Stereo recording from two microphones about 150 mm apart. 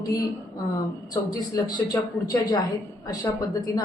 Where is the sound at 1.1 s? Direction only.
25° left (ahead or behind).